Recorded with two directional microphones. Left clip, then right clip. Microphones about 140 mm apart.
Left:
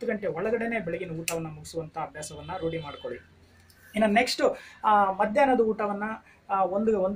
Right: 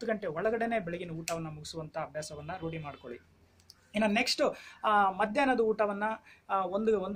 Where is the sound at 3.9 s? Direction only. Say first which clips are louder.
Left 5 dB; 20° right (ahead or behind).